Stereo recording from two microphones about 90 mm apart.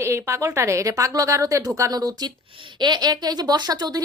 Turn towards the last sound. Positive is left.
turn(degrees=-45)  # may be behind; listen again after turning